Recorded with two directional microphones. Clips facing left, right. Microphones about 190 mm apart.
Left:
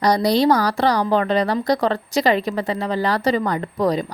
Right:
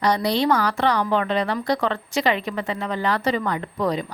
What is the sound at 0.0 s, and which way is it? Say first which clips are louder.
A woman's voice: left 4 dB; 40° left (ahead or behind).